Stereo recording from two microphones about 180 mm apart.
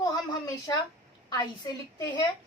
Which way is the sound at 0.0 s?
20° left (ahead or behind).